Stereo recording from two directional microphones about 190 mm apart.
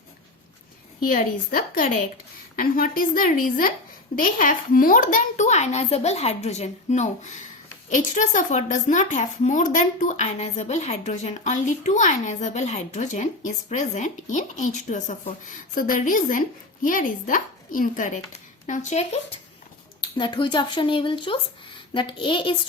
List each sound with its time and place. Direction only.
1.0 s a woman's voice: 45° left (ahead or behind)
20.0 s speech: 25° left (ahead or behind)